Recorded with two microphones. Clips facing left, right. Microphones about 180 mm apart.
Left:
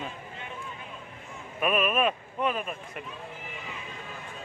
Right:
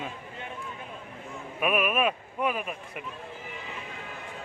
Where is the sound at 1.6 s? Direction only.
10° right (ahead or behind).